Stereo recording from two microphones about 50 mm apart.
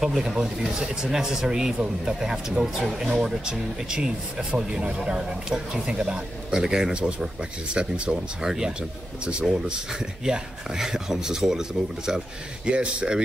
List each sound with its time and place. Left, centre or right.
0.0 s speech: centre